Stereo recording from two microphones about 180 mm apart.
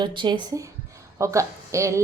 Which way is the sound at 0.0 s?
25° right (ahead or behind).